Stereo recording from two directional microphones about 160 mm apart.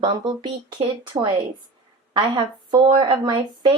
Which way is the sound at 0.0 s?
30° right (ahead or behind).